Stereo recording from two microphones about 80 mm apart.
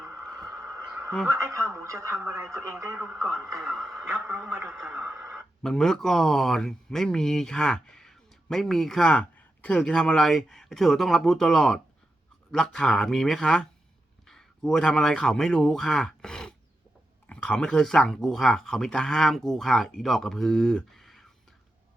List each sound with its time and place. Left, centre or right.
0.4 s a sound: right
1.3 s a man's voice: right
3.6 s speech: centre
3.9 s a man's voice: right
5.3 s speech: centre